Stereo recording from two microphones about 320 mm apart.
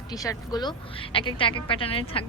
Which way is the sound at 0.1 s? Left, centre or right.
Centre.